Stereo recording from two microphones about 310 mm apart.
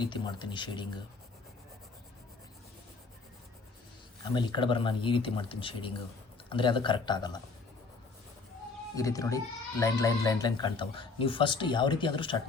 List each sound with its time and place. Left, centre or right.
0.0 s speech: centre
4.2 s speech: centre
9.0 s speech: centre